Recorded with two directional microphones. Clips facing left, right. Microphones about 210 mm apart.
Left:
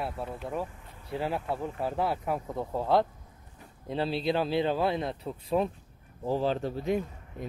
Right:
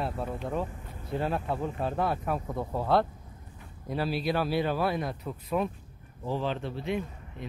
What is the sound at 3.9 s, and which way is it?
A man's voice, 25° left (ahead or behind).